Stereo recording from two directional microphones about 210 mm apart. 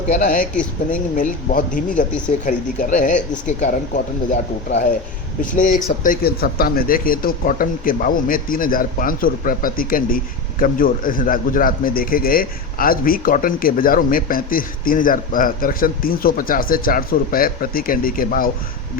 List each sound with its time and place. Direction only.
0.1 s speech: 40° left (ahead or behind)
5.4 s a man's voice: 40° left (ahead or behind)